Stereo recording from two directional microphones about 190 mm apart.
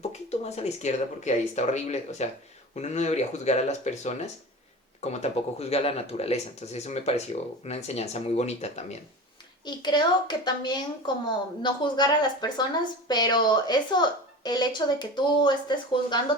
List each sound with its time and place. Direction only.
0.1 s speech: 35° left (ahead or behind)
9.6 s speech: 25° left (ahead or behind)